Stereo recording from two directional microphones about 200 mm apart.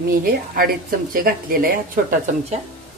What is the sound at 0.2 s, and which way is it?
Speech, 45° right (ahead or behind).